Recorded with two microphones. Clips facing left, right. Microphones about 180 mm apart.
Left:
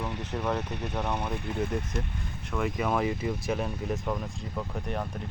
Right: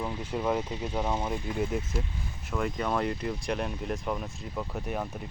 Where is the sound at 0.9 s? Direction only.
10° right (ahead or behind).